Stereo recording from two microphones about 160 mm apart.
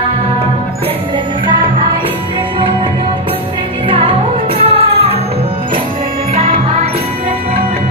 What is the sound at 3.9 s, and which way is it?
Music, 35° right (ahead or behind).